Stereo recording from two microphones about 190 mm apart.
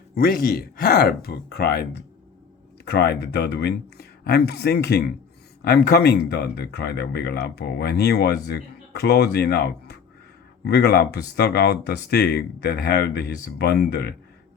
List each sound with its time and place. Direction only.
0.1 s speech: 50° left (ahead or behind)